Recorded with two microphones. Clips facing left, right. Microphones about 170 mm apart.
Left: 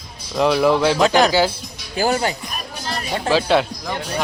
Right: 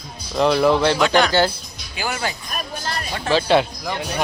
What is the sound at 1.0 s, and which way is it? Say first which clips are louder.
Speech: left 2 dB; 40° left (ahead or behind).